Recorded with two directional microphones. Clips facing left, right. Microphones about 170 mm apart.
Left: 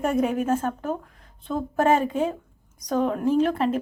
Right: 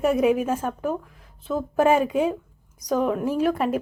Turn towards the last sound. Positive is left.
turn(degrees=-10)  # may be behind; listen again after turning